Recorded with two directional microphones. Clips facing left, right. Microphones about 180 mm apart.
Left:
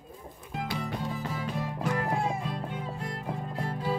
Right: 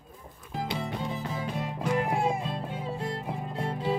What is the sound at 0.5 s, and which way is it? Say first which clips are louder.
Music: right 1 dB; 25° right (ahead or behind).